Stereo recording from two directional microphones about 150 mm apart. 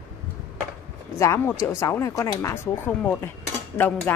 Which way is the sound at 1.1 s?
20° left (ahead or behind).